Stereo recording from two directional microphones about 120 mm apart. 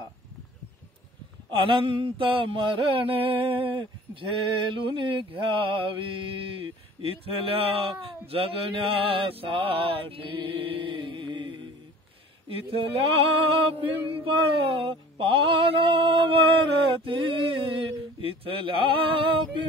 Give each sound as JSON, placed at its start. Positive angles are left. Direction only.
{"t": 1.5, "sound": "mantra", "side_deg": -45}